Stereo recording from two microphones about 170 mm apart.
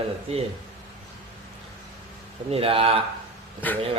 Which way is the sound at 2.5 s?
35° right (ahead or behind).